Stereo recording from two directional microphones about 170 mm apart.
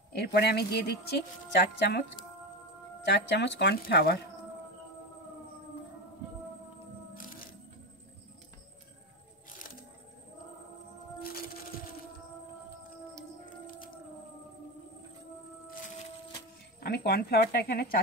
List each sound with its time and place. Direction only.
0.1 s speech: 70° left (ahead or behind)
3.1 s speech: 90° left; by 4.2 s 65° left (ahead or behind)
7.2 s music: 55° left (ahead or behind)
16.8 s speech: 70° left (ahead or behind)